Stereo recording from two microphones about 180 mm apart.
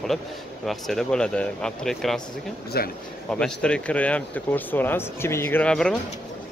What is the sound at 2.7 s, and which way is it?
Speech, 60° left (ahead or behind).